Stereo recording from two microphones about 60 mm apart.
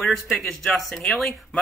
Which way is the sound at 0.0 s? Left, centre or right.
Centre.